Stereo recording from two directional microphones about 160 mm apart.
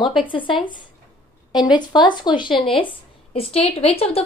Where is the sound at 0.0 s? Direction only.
30° left (ahead or behind).